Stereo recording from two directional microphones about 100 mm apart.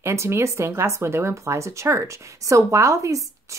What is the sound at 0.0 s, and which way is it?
A woman's voice, 25° right (ahead or behind).